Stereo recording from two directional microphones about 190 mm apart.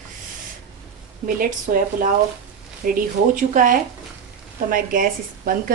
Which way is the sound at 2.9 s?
45° right (ahead or behind).